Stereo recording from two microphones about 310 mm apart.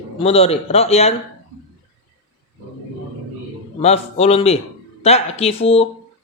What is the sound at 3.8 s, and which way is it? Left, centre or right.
Speech, centre.